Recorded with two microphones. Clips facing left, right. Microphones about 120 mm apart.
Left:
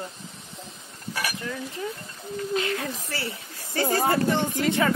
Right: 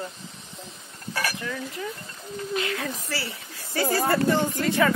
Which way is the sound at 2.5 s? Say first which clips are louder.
Left 1 dB; 30° left (ahead or behind).